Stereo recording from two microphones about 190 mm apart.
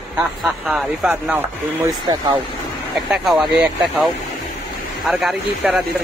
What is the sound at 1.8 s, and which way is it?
Speech, 20° right (ahead or behind).